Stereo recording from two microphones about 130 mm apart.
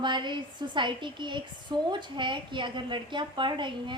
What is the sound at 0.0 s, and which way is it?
A woman's voice, 35° right (ahead or behind).